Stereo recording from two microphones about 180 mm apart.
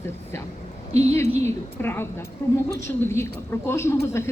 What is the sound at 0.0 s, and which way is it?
A woman's voice, 15° left (ahead or behind).